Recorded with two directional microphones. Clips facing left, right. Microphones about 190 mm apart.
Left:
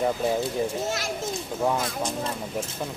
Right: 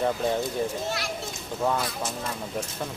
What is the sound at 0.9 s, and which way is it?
Speech, 45° left (ahead or behind).